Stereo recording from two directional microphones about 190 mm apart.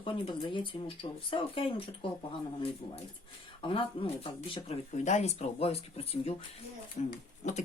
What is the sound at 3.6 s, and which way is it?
Speech, 30° left (ahead or behind).